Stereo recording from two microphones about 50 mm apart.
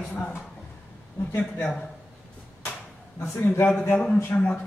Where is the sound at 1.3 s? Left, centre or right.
Left.